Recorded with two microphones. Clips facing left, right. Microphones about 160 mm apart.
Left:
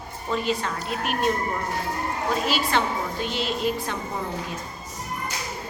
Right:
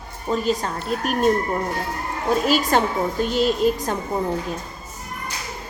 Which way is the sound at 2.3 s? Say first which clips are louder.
Right 6 dB; 45° right (ahead or behind).